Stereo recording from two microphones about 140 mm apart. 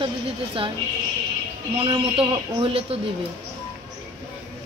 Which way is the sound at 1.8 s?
40° right (ahead or behind).